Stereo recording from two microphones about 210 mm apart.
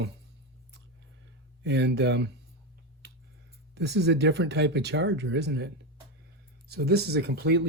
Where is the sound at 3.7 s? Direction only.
55° right (ahead or behind).